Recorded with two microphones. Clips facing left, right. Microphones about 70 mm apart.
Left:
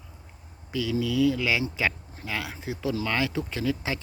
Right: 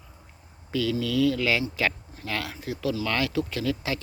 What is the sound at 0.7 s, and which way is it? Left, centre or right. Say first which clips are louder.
Speech: right 1 dB; centre.